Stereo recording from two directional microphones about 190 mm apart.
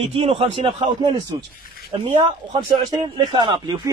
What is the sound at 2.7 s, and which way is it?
A man's voice, 25° right (ahead or behind).